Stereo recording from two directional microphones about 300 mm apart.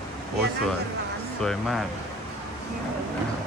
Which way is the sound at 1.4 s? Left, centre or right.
Centre.